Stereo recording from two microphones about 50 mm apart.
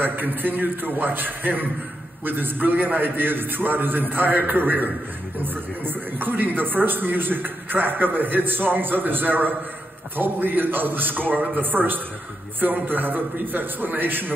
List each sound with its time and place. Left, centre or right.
0.0 s a man's voice: right